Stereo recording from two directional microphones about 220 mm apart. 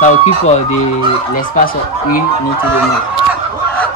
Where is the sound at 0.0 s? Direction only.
30° left (ahead or behind).